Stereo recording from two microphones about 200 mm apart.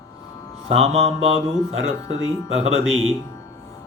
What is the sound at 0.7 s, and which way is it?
Speech, 30° right (ahead or behind).